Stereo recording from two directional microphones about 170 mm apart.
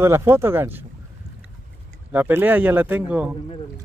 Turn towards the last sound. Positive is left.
turn(degrees=-10)  # may be behind; listen again after turning